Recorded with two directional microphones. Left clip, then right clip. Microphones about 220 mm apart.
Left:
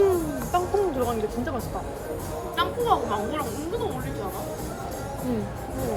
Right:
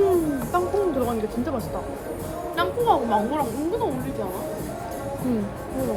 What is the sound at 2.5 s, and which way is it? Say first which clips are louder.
Speech: right 2 dB; 20° right (ahead or behind).